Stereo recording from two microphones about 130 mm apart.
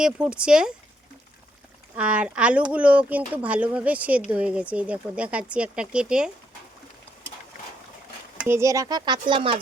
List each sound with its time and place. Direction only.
0.0 s speech: 10° right (ahead or behind)
2.0 s speech: 10° right (ahead or behind)
8.4 s speech: 25° right (ahead or behind); by 9.6 s 40° right (ahead or behind)